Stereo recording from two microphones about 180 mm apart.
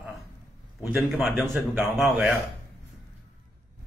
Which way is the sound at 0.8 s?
10° right (ahead or behind).